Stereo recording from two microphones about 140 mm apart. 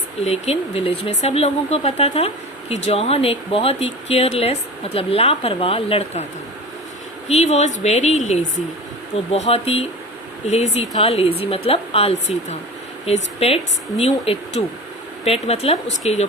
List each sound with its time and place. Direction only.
0.3 s speech: 45° left (ahead or behind)
7.3 s speech: 55° left (ahead or behind)
9.3 s speech: 45° left (ahead or behind)